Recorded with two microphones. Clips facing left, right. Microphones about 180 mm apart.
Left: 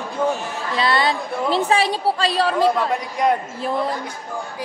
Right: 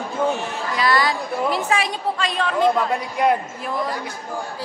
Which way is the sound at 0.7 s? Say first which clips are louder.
Left 1 dB; 25° left (ahead or behind).